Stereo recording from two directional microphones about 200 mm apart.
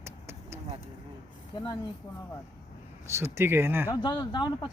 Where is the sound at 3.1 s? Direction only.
15° right (ahead or behind).